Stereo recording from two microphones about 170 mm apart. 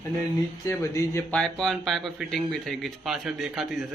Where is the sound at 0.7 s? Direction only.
20° left (ahead or behind).